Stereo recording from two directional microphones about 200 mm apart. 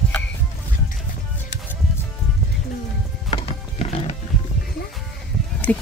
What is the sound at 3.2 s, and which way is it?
Music, 30° left (ahead or behind).